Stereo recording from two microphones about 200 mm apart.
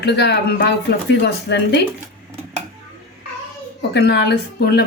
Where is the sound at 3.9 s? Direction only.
55° left (ahead or behind).